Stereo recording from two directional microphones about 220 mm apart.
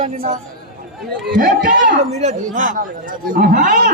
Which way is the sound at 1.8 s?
35° right (ahead or behind).